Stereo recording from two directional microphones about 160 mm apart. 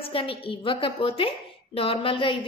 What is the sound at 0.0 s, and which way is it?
A woman's voice, 35° left (ahead or behind).